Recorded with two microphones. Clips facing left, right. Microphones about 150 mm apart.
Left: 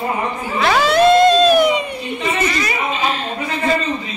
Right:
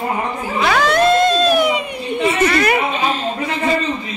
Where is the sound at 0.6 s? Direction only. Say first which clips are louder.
Left 2 dB; 5° left (ahead or behind).